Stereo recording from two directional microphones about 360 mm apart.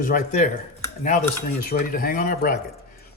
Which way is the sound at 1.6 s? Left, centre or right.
Left.